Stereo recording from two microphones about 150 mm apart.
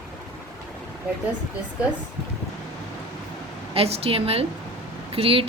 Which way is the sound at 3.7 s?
40° right (ahead or behind).